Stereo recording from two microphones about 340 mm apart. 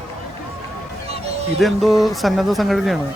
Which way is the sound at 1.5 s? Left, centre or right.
Centre.